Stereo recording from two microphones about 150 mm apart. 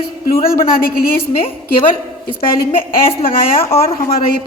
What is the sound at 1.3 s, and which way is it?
Speech, 40° left (ahead or behind).